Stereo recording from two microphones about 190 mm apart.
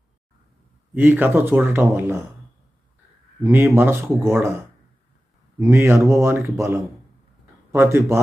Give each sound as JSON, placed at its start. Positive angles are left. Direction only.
{"t": 0.9, "sound": "speech", "side_deg": -10}
{"t": 3.4, "sound": "speech", "side_deg": -10}
{"t": 5.5, "sound": "speech", "side_deg": -15}